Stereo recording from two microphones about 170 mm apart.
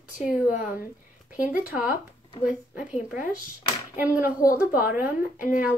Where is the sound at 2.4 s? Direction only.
10° right (ahead or behind).